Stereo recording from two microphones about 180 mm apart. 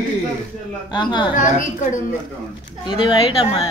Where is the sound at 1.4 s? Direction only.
45° left (ahead or behind).